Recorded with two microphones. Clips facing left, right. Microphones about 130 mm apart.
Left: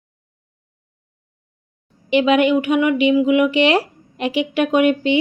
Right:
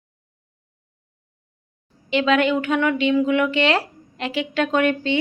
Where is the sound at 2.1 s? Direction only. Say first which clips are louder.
Left 4 dB; 15° left (ahead or behind).